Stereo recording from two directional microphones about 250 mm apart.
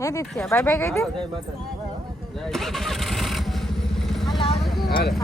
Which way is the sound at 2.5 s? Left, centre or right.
Centre.